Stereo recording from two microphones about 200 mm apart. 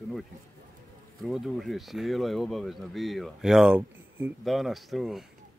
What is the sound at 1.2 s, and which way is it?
Speech, centre (ahead or behind).